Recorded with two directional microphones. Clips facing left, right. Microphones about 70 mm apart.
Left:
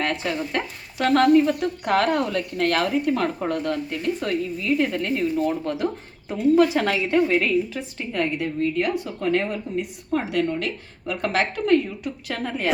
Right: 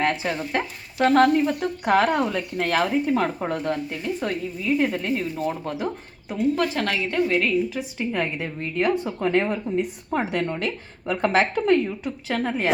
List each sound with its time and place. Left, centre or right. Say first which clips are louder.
0.0 s speech: right 1 dB; centre
6.6 s a woman's voice: left 5 dB; centre
8.1 s a woman's voice: left 5 dB; right